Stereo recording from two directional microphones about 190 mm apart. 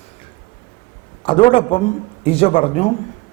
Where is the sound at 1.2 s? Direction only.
25° left (ahead or behind).